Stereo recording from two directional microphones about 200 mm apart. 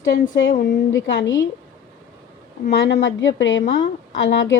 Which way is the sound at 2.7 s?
55° left (ahead or behind).